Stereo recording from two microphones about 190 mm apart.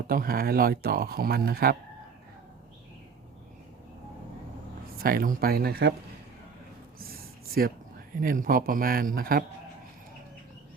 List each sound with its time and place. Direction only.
0.1 s speech: 50° right (ahead or behind)
4.9 s speech: 50° right (ahead or behind)
7.1 s a sound: 50° right (ahead or behind)
8.2 s speech: 45° right (ahead or behind)